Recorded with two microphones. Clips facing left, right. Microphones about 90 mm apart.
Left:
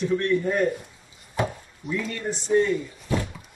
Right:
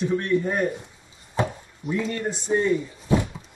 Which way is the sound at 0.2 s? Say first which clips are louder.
Left 1 dB; 20° right (ahead or behind).